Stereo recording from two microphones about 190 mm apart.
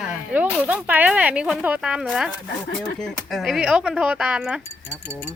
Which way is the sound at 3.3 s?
Centre (ahead or behind).